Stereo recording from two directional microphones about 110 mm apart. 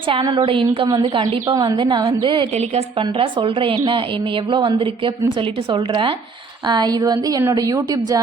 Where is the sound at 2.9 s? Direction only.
50° right (ahead or behind).